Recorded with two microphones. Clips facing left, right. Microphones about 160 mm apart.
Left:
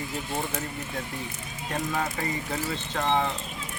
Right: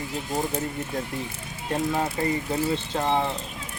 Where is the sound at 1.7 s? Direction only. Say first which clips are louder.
Right 4 dB; 25° right (ahead or behind).